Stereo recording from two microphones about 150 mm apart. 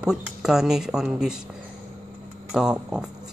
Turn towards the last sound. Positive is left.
turn(degrees=-5)  # may be behind; listen again after turning